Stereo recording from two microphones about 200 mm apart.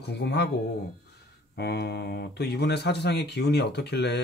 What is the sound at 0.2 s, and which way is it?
Speech, 60° left (ahead or behind).